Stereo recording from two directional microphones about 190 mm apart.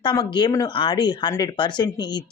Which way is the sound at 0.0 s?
25° left (ahead or behind).